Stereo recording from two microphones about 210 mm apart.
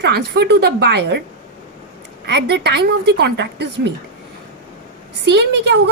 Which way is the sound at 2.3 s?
55° right (ahead or behind).